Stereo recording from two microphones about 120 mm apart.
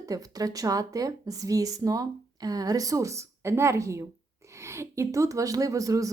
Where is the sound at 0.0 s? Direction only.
30° right (ahead or behind).